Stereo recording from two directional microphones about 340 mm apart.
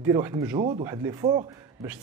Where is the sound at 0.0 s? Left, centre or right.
Centre.